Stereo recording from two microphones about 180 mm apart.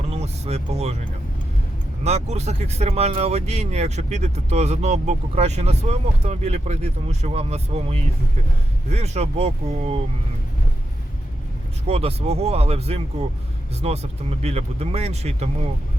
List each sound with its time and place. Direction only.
0.1 s vehicle: 35° right (ahead or behind)
2.0 s speech: 35° right (ahead or behind)
11.9 s speech: 35° right (ahead or behind)